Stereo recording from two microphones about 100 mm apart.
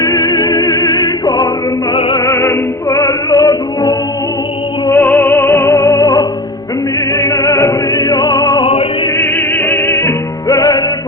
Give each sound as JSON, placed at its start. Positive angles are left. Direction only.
{"t": 0.2, "sound": "music", "side_deg": 45}
{"t": 2.1, "sound": "music", "side_deg": 30}
{"t": 4.9, "sound": "music", "side_deg": 25}
{"t": 7.2, "sound": "music", "side_deg": 25}
{"t": 8.6, "sound": "music", "side_deg": 65}
{"t": 9.1, "sound": "music", "side_deg": 25}
{"t": 10.5, "sound": "music", "side_deg": 40}